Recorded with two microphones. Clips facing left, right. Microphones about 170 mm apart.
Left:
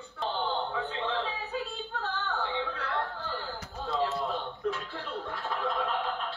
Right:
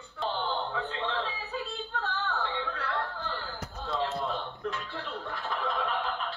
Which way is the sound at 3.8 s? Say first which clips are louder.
Left 1 dB; centre (ahead or behind).